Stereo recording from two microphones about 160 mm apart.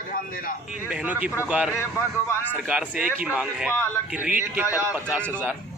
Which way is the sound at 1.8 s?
15° left (ahead or behind).